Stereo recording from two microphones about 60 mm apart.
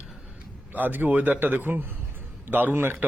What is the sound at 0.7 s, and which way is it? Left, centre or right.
Speech, right.